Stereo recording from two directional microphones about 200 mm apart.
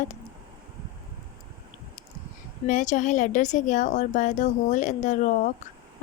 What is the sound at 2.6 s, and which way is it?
A woman's voice, 40° left (ahead or behind).